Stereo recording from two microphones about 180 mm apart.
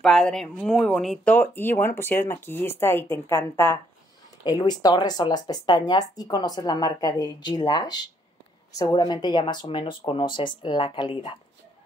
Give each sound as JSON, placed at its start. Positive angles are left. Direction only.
{"t": 0.0, "sound": "speech", "side_deg": 5}
{"t": 4.5, "sound": "speech", "side_deg": 25}